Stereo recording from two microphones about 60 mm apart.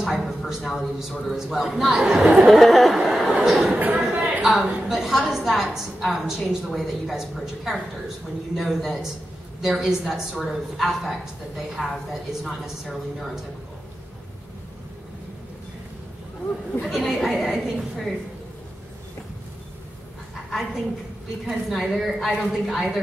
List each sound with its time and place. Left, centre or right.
0.0 s a woman's voice: centre
3.0 s chatter: centre
4.0 s a sound: centre
4.4 s a woman's voice: centre
16.8 s a woman's voice: centre
21.5 s a woman's voice: centre